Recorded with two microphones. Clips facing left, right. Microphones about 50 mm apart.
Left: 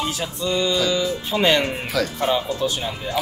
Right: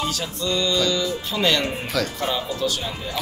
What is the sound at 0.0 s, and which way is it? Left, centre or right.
Speech, centre.